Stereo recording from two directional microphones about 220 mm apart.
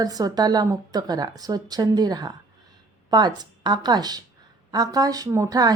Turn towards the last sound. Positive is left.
turn(degrees=-15)  # may be behind; listen again after turning